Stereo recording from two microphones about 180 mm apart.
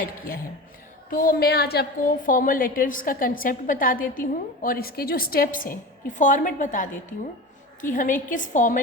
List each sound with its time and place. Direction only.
1.1 s a woman's voice: 50° left (ahead or behind)
7.9 s a woman's voice: 45° left (ahead or behind)